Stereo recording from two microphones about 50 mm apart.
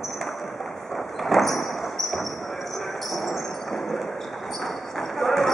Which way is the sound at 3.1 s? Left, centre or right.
Centre.